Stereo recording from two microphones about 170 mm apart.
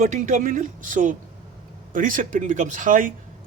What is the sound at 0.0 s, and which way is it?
Speech, 45° right (ahead or behind).